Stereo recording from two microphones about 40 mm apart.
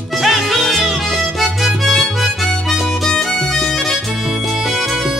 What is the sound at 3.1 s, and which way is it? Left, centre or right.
Music, centre.